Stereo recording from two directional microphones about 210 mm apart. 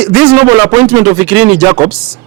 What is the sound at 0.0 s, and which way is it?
Speech, 5° right (ahead or behind).